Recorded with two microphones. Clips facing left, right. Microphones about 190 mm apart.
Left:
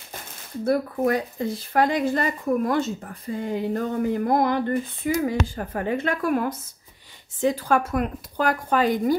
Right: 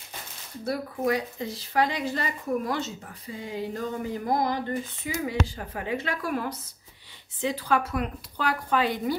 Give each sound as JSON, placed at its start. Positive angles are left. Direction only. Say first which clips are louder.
{"t": 0.7, "sound": "speech", "louder": "left 5 dB", "side_deg": 50}
{"t": 5.1, "sound": "speech", "louder": "left 5 dB", "side_deg": 45}